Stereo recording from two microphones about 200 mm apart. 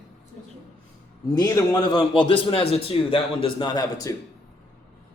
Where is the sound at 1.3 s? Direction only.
20° left (ahead or behind).